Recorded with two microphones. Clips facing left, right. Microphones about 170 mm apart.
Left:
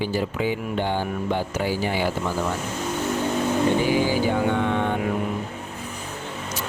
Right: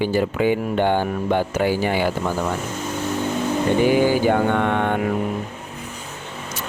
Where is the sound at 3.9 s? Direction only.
55° right (ahead or behind).